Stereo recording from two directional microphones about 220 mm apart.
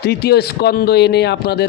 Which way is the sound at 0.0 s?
45° left (ahead or behind).